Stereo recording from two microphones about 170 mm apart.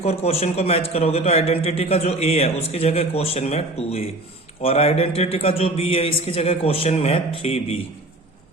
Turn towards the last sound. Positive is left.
turn(degrees=35)  # may be behind; listen again after turning